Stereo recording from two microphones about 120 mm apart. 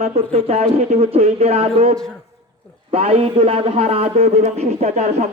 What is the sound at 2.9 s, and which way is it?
A man's voice, 55° right (ahead or behind).